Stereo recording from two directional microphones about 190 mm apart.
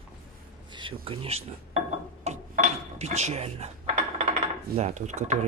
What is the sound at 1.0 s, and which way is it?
Speech, 30° right (ahead or behind).